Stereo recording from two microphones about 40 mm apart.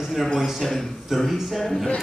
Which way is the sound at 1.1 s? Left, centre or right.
Centre.